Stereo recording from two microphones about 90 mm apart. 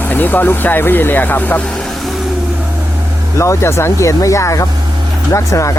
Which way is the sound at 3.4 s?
30° left (ahead or behind).